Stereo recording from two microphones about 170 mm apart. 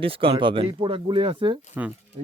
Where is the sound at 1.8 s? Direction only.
10° right (ahead or behind).